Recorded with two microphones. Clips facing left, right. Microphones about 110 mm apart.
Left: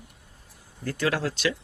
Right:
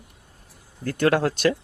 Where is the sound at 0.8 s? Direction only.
55° right (ahead or behind).